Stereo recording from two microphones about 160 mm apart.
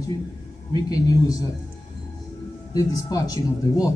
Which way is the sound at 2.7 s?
25° left (ahead or behind).